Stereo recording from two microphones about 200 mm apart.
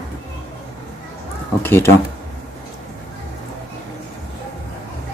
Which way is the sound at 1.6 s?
15° left (ahead or behind).